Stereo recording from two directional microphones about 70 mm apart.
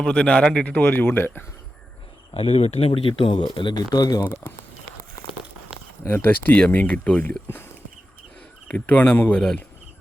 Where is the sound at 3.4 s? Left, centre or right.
Left.